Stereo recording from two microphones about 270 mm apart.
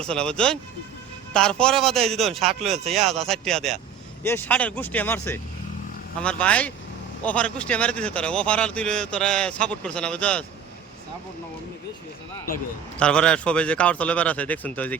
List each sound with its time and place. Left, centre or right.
0.0 s speech: centre
2.6 s speech: right
2.9 s speech: centre
13.0 s speech: centre